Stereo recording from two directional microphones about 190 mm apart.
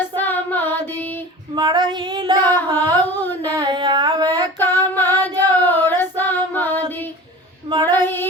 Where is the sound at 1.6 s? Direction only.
20° right (ahead or behind).